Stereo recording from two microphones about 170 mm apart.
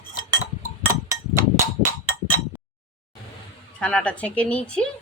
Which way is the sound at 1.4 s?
15° right (ahead or behind).